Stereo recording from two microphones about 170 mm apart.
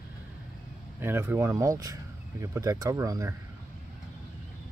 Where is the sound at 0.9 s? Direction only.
15° right (ahead or behind).